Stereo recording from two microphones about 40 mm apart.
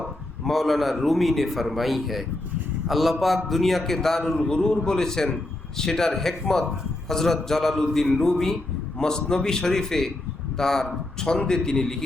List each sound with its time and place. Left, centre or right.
0.0 s a man's voice: centre